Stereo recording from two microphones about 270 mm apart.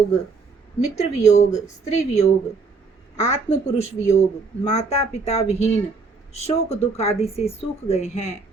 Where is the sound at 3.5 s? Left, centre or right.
Left.